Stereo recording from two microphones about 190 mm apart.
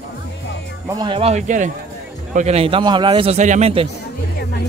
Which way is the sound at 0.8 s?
20° right (ahead or behind).